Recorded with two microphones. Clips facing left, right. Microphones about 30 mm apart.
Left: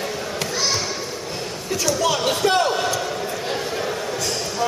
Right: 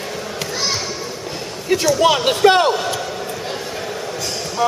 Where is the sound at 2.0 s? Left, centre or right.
Right.